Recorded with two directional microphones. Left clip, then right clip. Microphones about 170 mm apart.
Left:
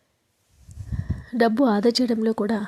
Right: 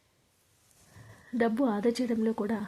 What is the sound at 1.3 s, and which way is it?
A woman's voice, 30° left (ahead or behind).